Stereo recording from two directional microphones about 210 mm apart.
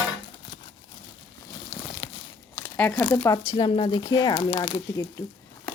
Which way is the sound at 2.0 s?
25° left (ahead or behind).